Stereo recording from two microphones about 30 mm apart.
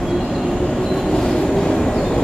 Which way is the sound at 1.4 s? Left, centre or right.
Centre.